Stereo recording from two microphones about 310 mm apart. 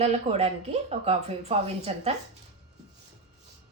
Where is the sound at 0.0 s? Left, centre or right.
Centre.